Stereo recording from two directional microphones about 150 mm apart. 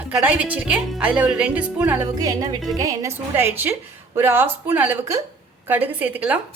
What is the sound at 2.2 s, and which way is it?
A woman's voice, 25° right (ahead or behind).